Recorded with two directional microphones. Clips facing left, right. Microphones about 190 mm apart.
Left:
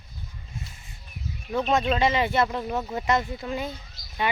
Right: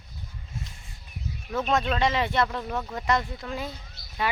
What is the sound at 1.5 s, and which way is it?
Speech, 15° left (ahead or behind).